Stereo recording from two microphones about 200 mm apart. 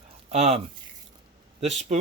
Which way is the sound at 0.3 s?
30° right (ahead or behind).